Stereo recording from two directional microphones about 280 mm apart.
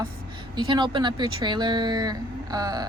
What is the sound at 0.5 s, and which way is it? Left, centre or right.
Speech, centre.